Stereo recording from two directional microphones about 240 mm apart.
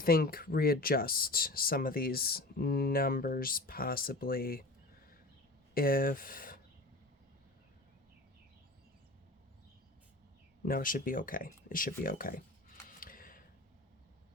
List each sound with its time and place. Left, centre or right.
0.0 s speech: left
5.7 s speech: left
10.7 s speech: left
13.0 s a sound: left